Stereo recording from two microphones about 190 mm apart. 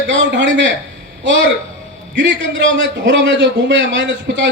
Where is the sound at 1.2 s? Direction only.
70° right (ahead or behind).